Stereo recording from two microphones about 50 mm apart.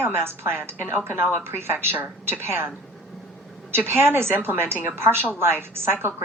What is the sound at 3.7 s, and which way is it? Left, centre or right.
A woman's voice, right.